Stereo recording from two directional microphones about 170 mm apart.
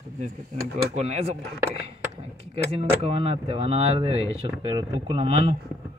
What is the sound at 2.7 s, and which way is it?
Speech, 35° right (ahead or behind).